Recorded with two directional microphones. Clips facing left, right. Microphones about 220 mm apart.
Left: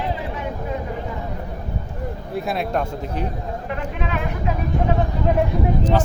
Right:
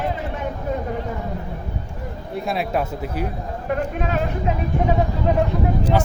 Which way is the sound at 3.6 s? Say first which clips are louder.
Right 7 dB; 45° right (ahead or behind).